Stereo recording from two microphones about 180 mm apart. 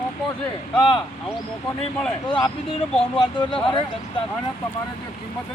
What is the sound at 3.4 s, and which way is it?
Speech, 25° left (ahead or behind).